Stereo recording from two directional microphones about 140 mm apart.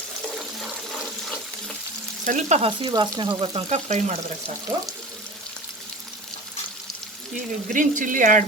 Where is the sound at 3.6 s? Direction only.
55° right (ahead or behind).